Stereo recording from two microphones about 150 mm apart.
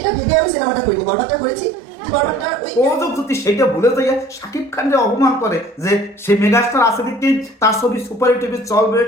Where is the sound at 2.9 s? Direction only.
20° left (ahead or behind).